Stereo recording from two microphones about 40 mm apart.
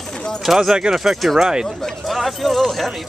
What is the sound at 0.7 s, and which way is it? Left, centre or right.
Speech, centre.